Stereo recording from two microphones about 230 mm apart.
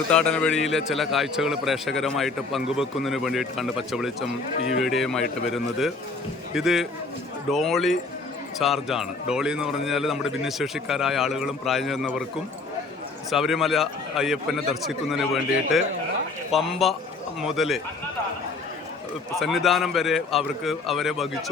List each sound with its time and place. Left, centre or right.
0.1 s a man's voice: centre
13.3 s a man's voice: centre
19.4 s a man's voice: centre